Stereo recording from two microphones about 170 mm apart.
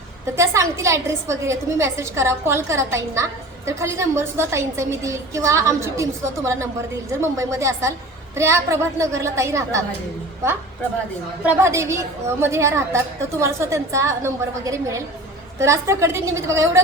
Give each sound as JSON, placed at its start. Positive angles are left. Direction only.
{"t": 0.3, "sound": "a woman's voice", "side_deg": -15}
{"t": 11.4, "sound": "a woman's voice", "side_deg": -15}